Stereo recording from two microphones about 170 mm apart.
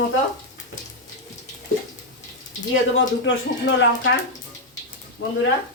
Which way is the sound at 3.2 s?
90° left.